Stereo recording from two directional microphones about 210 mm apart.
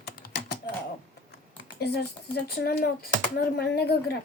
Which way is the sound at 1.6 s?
50° left (ahead or behind).